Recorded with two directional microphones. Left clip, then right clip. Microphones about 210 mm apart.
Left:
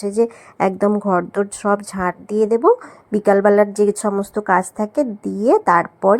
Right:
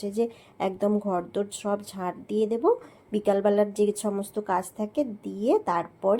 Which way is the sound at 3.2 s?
35° left (ahead or behind).